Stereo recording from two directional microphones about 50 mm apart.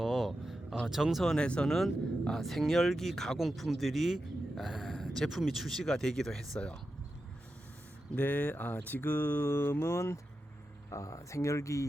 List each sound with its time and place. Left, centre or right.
0.0 s vehicle: centre
0.8 s speech: centre
1.4 s speech: left
1.6 s a man's voice: centre
4.9 s a sound: centre
5.4 s speech: centre
8.1 s speech: left
9.0 s mantra: left
10.9 s speech: left